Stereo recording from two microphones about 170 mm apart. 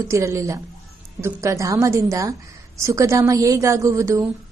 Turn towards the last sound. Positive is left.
turn(degrees=-15)  # may be behind; listen again after turning